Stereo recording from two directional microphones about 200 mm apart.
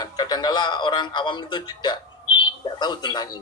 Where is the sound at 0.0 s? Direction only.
20° left (ahead or behind).